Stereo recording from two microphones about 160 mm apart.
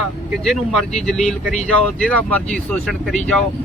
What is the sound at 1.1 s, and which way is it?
Speech, centre (ahead or behind).